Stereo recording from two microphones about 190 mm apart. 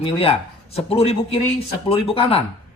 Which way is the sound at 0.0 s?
30° left (ahead or behind).